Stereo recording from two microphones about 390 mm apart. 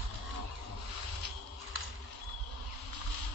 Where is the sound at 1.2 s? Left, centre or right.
Right.